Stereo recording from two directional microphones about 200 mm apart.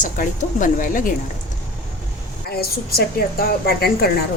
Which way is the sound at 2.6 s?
50° left (ahead or behind).